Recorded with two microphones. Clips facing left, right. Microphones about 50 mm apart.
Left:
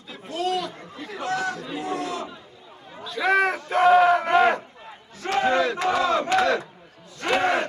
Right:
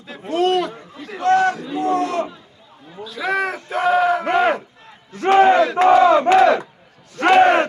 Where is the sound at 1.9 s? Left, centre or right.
Right.